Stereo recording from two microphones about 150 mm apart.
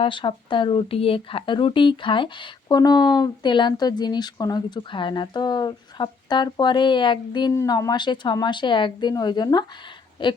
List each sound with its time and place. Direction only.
0.0 s speech: 35° left (ahead or behind)
7.5 s speech: 20° left (ahead or behind)